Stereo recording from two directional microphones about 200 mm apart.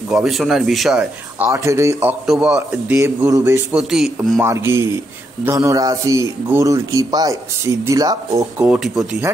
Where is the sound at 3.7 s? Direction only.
Centre (ahead or behind).